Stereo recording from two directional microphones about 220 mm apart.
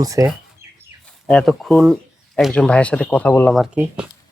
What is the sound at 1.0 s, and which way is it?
Speech, 5° left (ahead or behind).